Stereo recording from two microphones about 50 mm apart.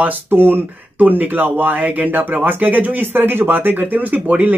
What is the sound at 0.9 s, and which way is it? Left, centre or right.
Speech, right.